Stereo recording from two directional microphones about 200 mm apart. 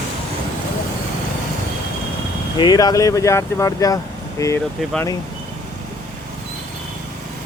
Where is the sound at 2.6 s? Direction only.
20° left (ahead or behind).